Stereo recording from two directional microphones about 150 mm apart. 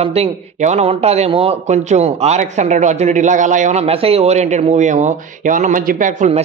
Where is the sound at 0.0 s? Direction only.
45° right (ahead or behind).